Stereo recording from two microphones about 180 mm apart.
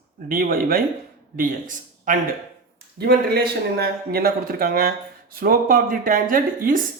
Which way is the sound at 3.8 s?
60° right (ahead or behind).